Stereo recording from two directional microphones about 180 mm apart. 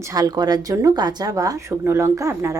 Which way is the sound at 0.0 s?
20° right (ahead or behind).